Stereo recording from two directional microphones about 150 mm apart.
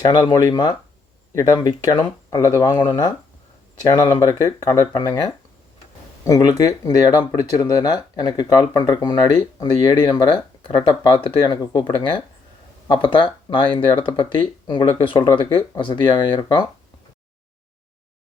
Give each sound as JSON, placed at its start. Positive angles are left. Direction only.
{"t": 0.2, "sound": "speech", "side_deg": 25}